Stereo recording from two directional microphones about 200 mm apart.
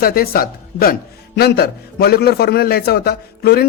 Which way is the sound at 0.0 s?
50° left (ahead or behind).